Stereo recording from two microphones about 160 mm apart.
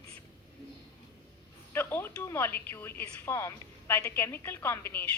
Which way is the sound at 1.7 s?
15° left (ahead or behind).